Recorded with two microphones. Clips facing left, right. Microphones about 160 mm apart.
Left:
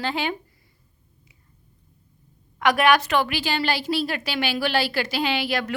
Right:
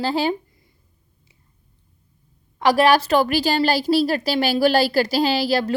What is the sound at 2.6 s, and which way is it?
A woman's voice, 30° right (ahead or behind).